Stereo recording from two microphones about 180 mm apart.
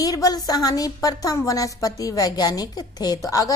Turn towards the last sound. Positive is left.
turn(degrees=20)  # may be behind; listen again after turning